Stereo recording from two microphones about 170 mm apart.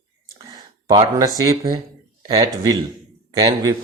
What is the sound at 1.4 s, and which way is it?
Speech, 20° right (ahead or behind).